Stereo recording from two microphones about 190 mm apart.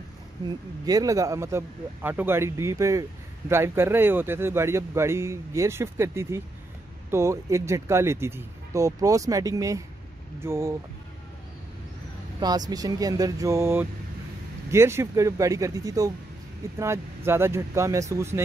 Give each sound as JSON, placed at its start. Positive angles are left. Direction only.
{"t": 0.5, "sound": "a man's voice", "side_deg": -20}
{"t": 12.4, "sound": "a man's voice", "side_deg": -20}